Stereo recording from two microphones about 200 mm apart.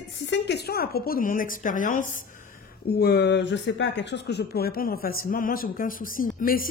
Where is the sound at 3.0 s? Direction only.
55° left (ahead or behind).